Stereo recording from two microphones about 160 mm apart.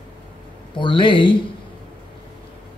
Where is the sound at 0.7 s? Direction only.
30° left (ahead or behind).